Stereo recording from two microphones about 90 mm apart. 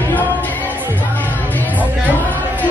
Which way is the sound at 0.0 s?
20° left (ahead or behind).